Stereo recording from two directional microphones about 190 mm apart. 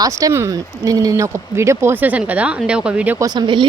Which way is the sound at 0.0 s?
15° right (ahead or behind).